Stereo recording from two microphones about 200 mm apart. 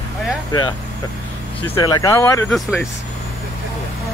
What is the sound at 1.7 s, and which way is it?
Speech, 20° left (ahead or behind).